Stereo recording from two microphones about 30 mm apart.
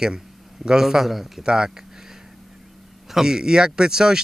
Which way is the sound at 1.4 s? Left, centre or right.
Right.